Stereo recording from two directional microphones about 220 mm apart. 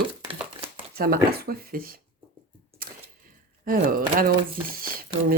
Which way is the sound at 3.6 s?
40° right (ahead or behind).